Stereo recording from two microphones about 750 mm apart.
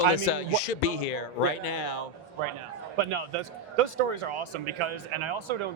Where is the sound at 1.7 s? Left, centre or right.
Left.